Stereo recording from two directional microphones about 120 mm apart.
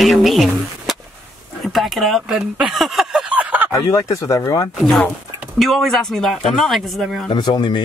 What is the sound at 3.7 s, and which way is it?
Speech, 25° left (ahead or behind).